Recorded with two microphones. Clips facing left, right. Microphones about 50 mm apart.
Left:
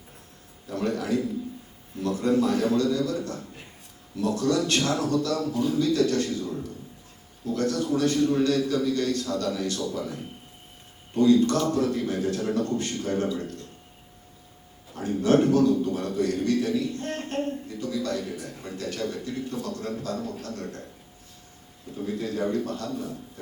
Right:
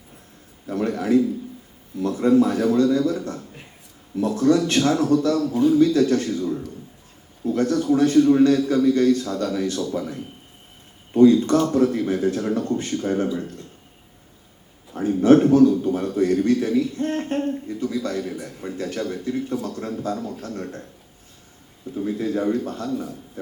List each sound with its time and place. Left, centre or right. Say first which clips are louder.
0.7 s a man's voice: right 6 dB; right
14.9 s a man's voice: right 6 dB; right
22.0 s a man's voice: right 5 dB; right